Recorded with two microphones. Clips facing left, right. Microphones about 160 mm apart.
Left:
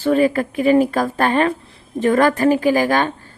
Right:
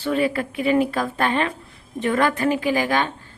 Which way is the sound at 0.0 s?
40° left (ahead or behind).